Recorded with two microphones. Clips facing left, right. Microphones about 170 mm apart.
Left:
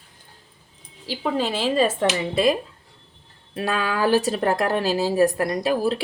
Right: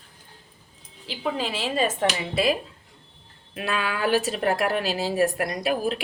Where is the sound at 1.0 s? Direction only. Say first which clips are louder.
Left 4 dB; 40° left (ahead or behind).